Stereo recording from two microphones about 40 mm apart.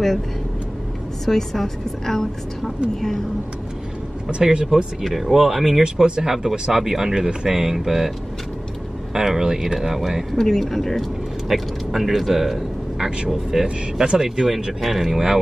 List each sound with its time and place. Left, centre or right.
1.2 s a woman's voice: centre
4.3 s speech: right
5.0 s speech: centre
9.1 s speech: centre
10.3 s a woman's voice: centre
11.4 s speech: centre